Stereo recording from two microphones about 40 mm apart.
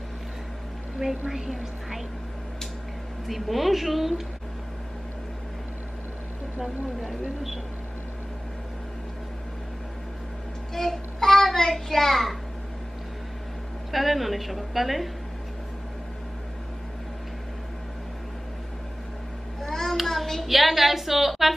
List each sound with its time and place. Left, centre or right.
1.0 s a woman's voice: centre
1.3 s a woman's voice: centre
3.3 s a woman's voice: centre
6.6 s speech: centre
10.7 s a child's voice: centre
13.9 s a woman's voice: centre
19.6 s a sound: centre
20.4 s a woman's voice: centre